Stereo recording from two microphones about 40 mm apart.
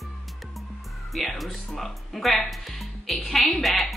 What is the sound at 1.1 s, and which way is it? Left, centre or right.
Speech, centre.